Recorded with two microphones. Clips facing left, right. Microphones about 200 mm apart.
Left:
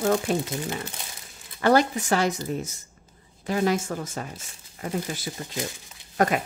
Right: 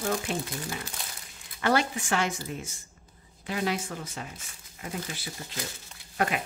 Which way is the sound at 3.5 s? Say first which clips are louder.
Left 6 dB; 45° left (ahead or behind).